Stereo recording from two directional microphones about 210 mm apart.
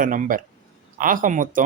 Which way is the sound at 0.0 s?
40° right (ahead or behind).